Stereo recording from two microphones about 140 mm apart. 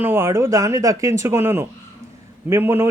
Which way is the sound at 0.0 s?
15° right (ahead or behind).